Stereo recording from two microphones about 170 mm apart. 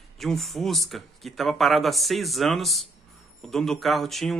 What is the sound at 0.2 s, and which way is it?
Speech, centre (ahead or behind).